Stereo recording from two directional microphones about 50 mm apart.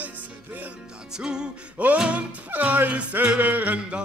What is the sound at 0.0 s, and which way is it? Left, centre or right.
Music, right.